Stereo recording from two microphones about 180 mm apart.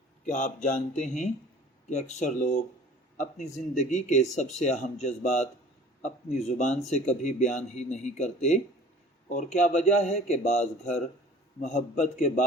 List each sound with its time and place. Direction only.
0.3 s speech: 45° left (ahead or behind)